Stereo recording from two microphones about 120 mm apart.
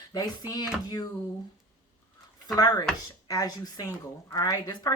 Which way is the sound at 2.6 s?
35° left (ahead or behind).